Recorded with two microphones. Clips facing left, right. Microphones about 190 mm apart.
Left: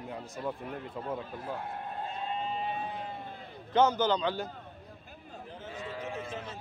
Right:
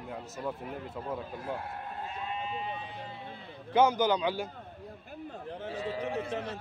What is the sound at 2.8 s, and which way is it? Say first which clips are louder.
Sheep: left 4 dB; 50° left (ahead or behind).